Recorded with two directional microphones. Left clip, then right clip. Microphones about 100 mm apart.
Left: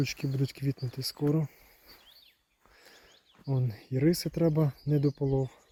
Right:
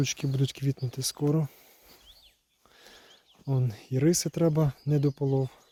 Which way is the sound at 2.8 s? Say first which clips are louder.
Right 3 dB; 25° right (ahead or behind).